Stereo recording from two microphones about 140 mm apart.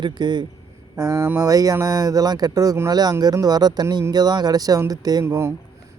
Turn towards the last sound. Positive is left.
turn(degrees=-20)  # may be behind; listen again after turning